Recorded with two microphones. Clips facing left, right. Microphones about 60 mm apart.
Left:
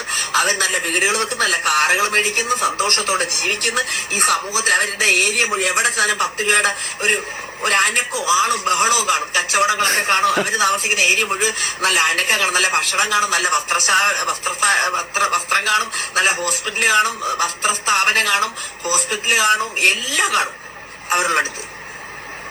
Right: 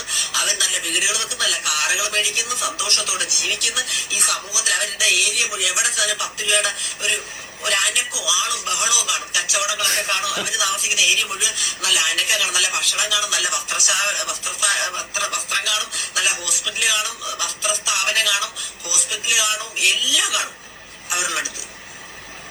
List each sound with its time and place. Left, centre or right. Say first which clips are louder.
0.1 s a man's voice: left 7 dB; left